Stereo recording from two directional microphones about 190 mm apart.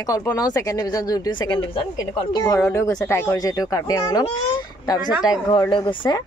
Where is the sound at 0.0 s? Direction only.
20° left (ahead or behind).